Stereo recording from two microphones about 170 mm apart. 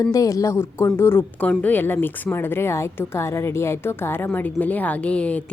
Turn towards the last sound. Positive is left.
turn(degrees=5)  # may be behind; listen again after turning